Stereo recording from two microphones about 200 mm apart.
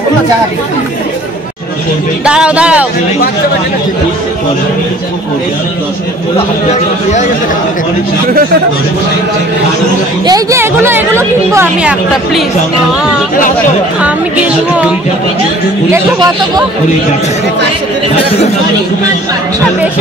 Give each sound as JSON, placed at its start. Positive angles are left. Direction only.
{"t": 2.2, "sound": "speech", "side_deg": -5}
{"t": 6.3, "sound": "a man's voice", "side_deg": 35}
{"t": 10.2, "sound": "a woman's voice", "side_deg": -15}
{"t": 15.9, "sound": "speech", "side_deg": -20}